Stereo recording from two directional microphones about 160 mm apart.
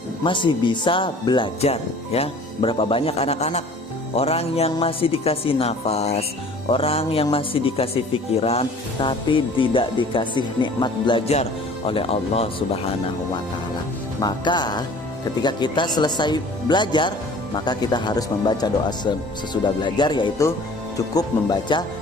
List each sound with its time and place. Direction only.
0.3 s speech: 30° left (ahead or behind)
14.2 s speech: 25° left (ahead or behind)